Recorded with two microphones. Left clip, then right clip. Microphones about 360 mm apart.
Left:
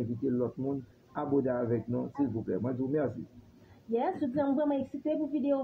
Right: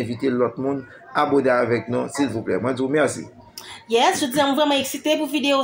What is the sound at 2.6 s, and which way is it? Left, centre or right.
Speech, left.